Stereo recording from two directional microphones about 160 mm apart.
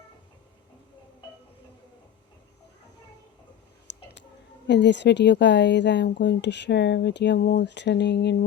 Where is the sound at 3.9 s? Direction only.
90° left.